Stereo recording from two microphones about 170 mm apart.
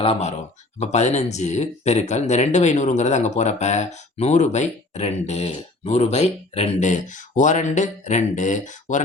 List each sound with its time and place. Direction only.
0.0 s speech: 40° left (ahead or behind)